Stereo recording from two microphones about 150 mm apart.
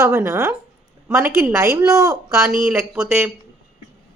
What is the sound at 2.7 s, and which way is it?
Speech, 5° right (ahead or behind).